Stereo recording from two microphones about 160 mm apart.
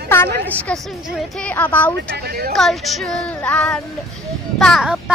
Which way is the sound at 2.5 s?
Centre (ahead or behind).